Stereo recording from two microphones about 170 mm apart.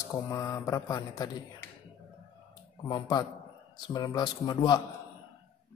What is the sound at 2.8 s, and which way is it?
Speech, 25° left (ahead or behind).